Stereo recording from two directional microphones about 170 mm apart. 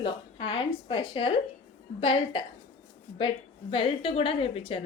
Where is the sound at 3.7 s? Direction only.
30° left (ahead or behind).